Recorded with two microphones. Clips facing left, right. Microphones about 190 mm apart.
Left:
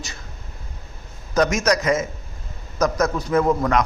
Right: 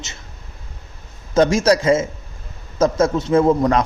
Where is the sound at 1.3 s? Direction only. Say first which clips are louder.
Right 5 dB; 30° right (ahead or behind).